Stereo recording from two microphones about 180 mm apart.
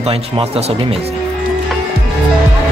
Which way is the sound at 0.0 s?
35° right (ahead or behind).